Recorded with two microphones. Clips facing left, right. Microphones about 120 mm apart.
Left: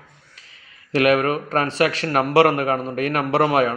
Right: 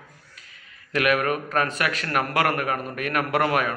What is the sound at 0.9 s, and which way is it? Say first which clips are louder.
A man's voice: left 5 dB; 30° left (ahead or behind).